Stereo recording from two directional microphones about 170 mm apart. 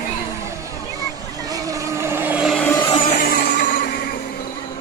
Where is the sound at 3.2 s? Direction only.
65° left (ahead or behind).